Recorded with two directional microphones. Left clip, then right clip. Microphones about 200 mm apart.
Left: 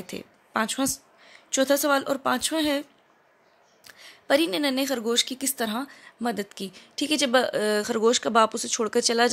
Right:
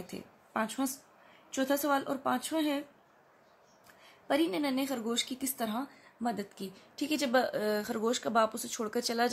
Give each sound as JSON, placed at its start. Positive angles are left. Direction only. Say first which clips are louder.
{"t": 0.0, "sound": "speech", "louder": "left 7 dB", "side_deg": 45}
{"t": 3.8, "sound": "a woman's voice", "louder": "left 9 dB", "side_deg": 45}